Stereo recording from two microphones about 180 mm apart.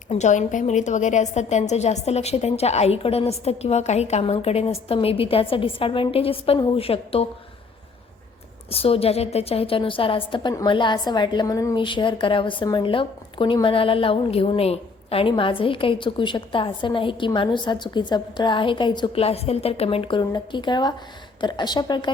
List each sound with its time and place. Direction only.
0.1 s a woman's voice: 40° left (ahead or behind)
8.7 s a woman's voice: 35° left (ahead or behind)